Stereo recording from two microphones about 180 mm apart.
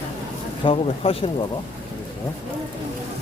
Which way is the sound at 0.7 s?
30° left (ahead or behind).